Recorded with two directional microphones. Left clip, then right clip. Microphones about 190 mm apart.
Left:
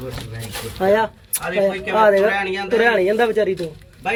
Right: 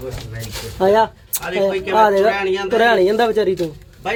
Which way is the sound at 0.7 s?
30° right (ahead or behind).